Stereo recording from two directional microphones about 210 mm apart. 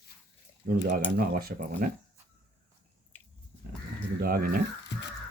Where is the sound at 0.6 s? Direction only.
45° right (ahead or behind).